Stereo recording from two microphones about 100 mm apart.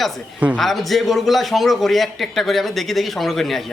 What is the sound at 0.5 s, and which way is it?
A woman's voice, centre (ahead or behind).